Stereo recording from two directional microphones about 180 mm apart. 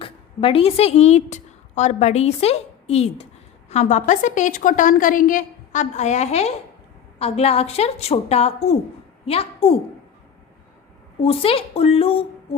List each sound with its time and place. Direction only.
0.0 s a woman's voice: 30° left (ahead or behind)
11.2 s a woman's voice: 30° left (ahead or behind)